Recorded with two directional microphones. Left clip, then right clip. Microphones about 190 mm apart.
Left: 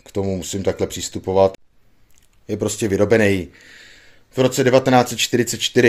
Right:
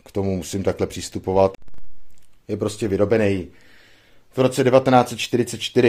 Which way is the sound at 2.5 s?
10° left (ahead or behind).